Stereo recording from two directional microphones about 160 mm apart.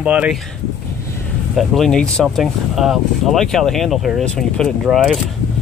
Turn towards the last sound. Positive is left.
turn(degrees=0)  # may be behind; listen again after turning